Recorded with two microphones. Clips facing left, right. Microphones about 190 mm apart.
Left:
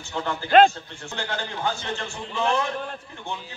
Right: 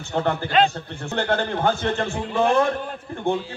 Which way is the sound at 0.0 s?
60° right (ahead or behind).